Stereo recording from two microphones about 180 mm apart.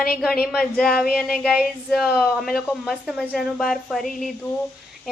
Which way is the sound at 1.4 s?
Centre (ahead or behind).